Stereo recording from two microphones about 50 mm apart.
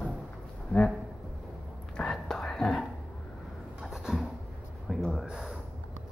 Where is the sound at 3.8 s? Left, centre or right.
Centre.